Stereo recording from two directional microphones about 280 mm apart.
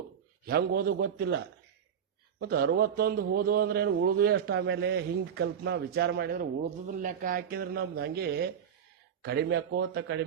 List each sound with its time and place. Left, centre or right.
0.4 s a man's voice: right